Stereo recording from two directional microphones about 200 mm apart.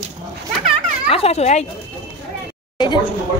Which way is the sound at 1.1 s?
30° left (ahead or behind).